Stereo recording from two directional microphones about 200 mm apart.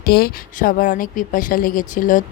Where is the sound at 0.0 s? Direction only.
50° left (ahead or behind).